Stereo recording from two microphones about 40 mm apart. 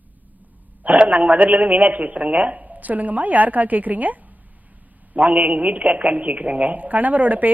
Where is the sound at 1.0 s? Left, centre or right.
Right.